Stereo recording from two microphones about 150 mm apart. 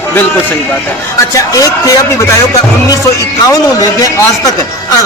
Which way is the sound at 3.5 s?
25° left (ahead or behind).